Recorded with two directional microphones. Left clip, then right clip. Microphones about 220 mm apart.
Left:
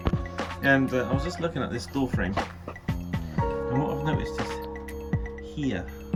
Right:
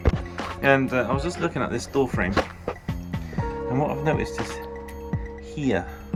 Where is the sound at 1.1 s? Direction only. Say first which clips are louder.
Right 4 dB; 20° right (ahead or behind).